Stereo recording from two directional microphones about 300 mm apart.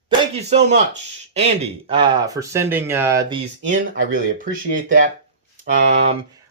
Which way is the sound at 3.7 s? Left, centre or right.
Right.